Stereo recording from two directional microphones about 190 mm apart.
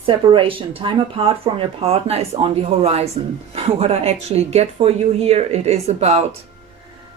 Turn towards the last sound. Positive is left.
turn(degrees=-35)  # may be behind; listen again after turning